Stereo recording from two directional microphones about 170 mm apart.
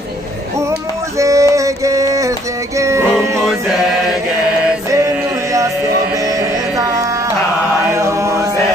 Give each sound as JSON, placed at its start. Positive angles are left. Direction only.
{"t": 1.1, "sound": "a sound", "side_deg": -20}
{"t": 2.8, "sound": "music", "side_deg": -15}
{"t": 3.4, "sound": "mantra", "side_deg": 0}
{"t": 4.9, "sound": "music", "side_deg": -20}
{"t": 7.9, "sound": "chant", "side_deg": -15}